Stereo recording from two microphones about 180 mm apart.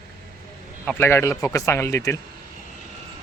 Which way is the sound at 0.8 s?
15° left (ahead or behind).